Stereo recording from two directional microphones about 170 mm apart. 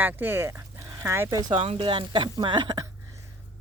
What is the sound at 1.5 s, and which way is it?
Speech, 35° right (ahead or behind).